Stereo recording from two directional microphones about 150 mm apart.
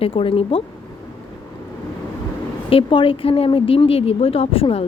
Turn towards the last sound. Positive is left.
turn(degrees=40)  # may be behind; listen again after turning